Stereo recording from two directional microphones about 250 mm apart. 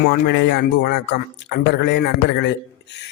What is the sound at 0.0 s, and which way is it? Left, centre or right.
A man's voice, left.